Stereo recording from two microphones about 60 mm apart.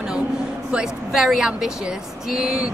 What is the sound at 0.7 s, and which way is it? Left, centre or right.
Speech, centre.